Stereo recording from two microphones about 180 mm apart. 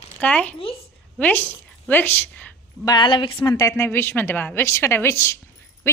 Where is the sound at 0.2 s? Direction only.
5° left (ahead or behind).